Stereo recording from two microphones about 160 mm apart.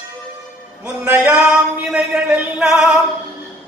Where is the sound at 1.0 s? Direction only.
5° right (ahead or behind).